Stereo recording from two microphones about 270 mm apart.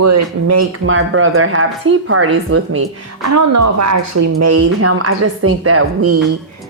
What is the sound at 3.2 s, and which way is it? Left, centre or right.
Speech, right.